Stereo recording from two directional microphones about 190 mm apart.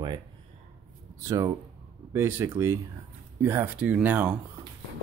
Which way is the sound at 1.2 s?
15° right (ahead or behind).